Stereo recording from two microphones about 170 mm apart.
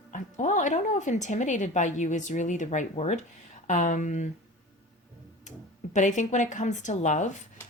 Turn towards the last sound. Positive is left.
turn(degrees=45)  # may be behind; listen again after turning